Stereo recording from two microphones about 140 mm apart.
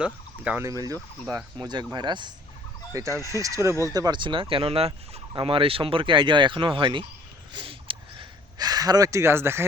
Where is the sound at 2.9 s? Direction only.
20° right (ahead or behind).